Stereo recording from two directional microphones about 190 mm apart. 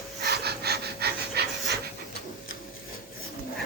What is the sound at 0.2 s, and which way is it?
Pant, 55° right (ahead or behind).